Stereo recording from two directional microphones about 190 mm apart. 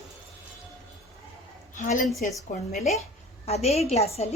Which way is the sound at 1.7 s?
40° left (ahead or behind).